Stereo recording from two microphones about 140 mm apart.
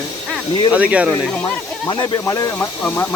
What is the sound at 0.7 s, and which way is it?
Speech, 10° right (ahead or behind).